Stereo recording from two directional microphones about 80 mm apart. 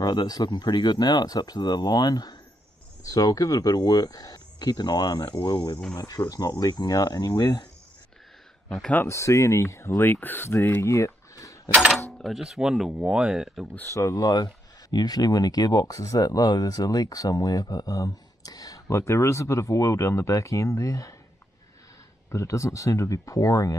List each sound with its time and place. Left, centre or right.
0.0 s speech: left
8.9 s speech: left
10.9 s a sound: left
11.7 s speech: centre
12.2 s speech: centre
13.9 s speech: left
22.3 s speech: left